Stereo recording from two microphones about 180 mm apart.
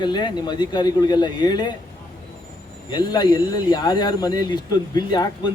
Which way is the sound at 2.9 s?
25° left (ahead or behind).